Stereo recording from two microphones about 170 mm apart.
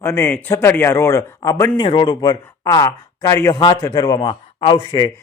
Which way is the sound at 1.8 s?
30° left (ahead or behind).